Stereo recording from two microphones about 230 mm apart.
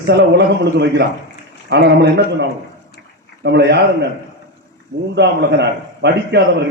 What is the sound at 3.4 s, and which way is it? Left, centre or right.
Speech, right.